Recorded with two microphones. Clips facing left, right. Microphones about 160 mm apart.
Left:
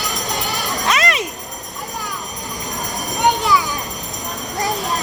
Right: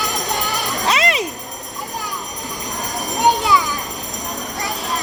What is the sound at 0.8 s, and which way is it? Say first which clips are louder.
Jingle bell: right 1 dB; 30° right (ahead or behind).